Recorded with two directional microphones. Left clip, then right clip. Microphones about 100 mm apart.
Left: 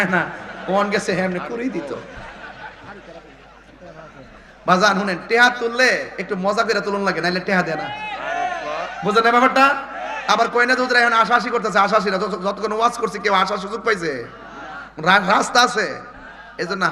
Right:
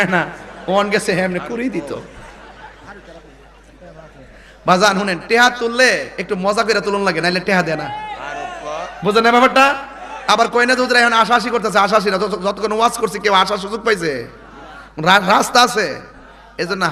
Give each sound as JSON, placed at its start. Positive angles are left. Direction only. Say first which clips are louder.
{"t": 0.0, "sound": "a man's voice", "louder": "right 3 dB", "side_deg": -50}
{"t": 4.6, "sound": "a man's voice", "louder": "right 3 dB", "side_deg": -50}
{"t": 8.0, "sound": "a sound", "louder": "left 3 dB", "side_deg": -15}
{"t": 9.0, "sound": "a man's voice", "louder": "right 3 dB", "side_deg": -50}